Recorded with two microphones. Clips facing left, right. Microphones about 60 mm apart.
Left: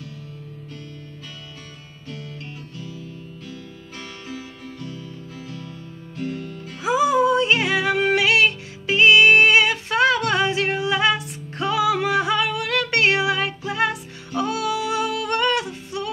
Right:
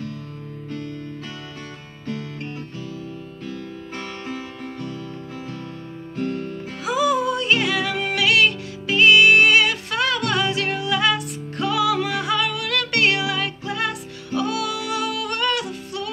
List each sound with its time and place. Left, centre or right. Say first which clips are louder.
6.1 s music: right 3 dB; right
6.8 s music: left 3 dB; left